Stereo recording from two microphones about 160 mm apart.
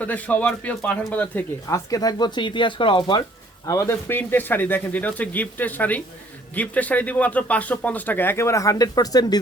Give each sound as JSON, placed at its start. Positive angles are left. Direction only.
{"t": 0.0, "sound": "speech", "side_deg": 10}
{"t": 1.9, "sound": "speech", "side_deg": 25}
{"t": 3.7, "sound": "speech", "side_deg": 20}